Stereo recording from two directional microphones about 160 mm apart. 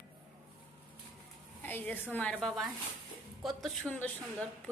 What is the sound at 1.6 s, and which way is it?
A woman's voice, 10° left (ahead or behind).